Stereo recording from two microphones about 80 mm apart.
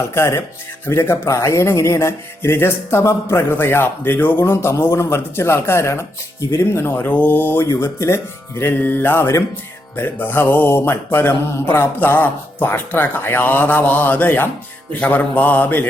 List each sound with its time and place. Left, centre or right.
0.1 s speech: left
6.5 s music: left